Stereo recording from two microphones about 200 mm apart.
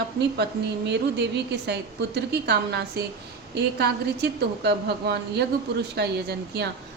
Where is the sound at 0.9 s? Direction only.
60° right (ahead or behind).